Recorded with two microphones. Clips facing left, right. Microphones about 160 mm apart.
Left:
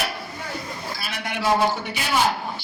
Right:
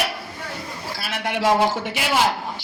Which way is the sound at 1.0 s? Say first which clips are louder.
Right 8 dB; 90° right.